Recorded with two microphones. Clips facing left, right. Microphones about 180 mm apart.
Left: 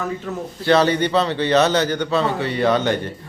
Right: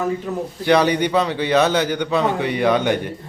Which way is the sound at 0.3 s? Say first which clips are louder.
Left 1 dB; 15° right (ahead or behind).